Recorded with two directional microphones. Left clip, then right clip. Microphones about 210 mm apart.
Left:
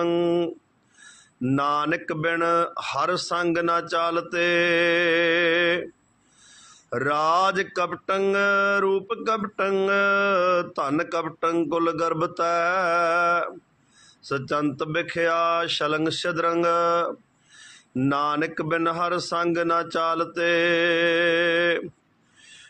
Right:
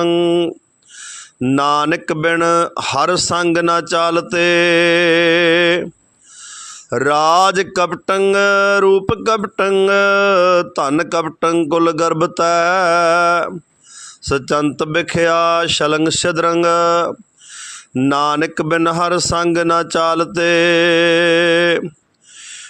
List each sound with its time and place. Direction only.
0.0 s speech: 45° right (ahead or behind)
1.0 s mantra: 50° right (ahead or behind)
6.9 s mantra: 50° right (ahead or behind)